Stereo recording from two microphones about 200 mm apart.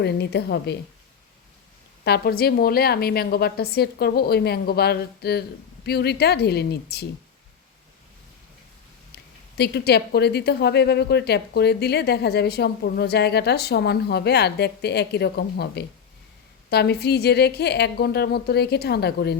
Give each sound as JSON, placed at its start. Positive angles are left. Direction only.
{"t": 0.0, "sound": "speech", "side_deg": 55}
{"t": 2.0, "sound": "a woman's voice", "side_deg": 55}
{"t": 9.6, "sound": "a woman's voice", "side_deg": 55}